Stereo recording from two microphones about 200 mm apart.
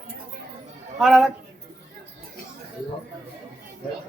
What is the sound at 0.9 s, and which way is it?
Speech, centre (ahead or behind).